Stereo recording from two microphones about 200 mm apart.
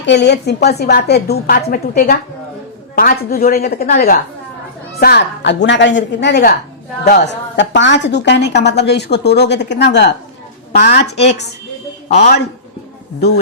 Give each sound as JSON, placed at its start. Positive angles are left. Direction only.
{"t": 0.0, "sound": "a woman's voice", "side_deg": 60}
{"t": 4.9, "sound": "a woman's voice", "side_deg": 55}
{"t": 12.0, "sound": "a man's voice", "side_deg": 35}